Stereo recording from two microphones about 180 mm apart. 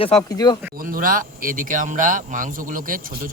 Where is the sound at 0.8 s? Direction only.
50° right (ahead or behind).